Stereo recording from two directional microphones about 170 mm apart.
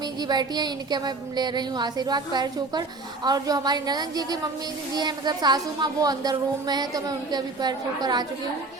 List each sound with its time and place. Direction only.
0.2 s speech: 25° right (ahead or behind)